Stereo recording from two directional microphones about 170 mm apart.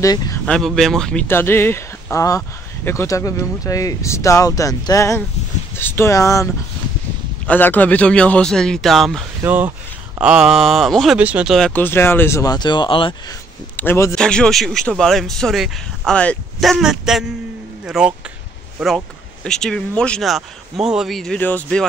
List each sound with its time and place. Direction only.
0.0 s speech: 20° left (ahead or behind)
0.5 s speech: centre (ahead or behind)
9.4 s speech: 15° right (ahead or behind)
11.7 s speech: 10° left (ahead or behind); by 13.4 s 30° left (ahead or behind)
13.7 s a man's voice: 15° left (ahead or behind); by 18.1 s 5° right (ahead or behind)
19.4 s speech: 5° left (ahead or behind)